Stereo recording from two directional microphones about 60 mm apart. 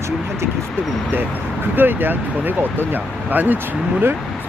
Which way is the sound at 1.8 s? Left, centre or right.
Right.